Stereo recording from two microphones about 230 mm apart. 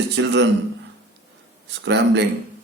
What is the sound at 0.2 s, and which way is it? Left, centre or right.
Speech, right.